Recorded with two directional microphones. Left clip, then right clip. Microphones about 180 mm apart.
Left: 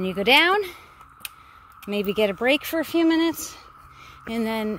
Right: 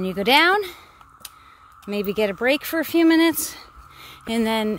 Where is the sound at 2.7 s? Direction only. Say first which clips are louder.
Right 3 dB; 20° right (ahead or behind).